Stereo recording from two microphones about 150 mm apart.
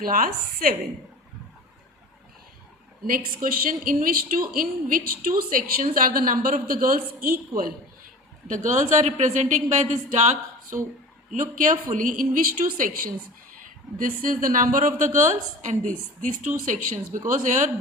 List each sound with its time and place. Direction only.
0.0 s a woman's voice: 75° right (ahead or behind)
3.1 s a woman's voice: 65° right (ahead or behind)
8.4 s a woman's voice: 60° right (ahead or behind)